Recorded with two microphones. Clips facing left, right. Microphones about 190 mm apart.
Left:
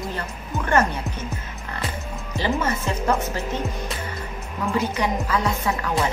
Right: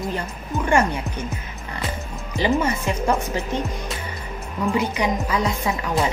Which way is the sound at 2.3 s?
15° right (ahead or behind).